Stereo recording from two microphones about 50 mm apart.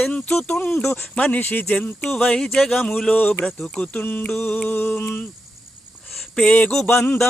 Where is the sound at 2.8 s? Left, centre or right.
Left.